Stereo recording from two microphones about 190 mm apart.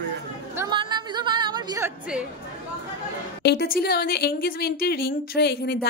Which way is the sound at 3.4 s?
55° left (ahead or behind).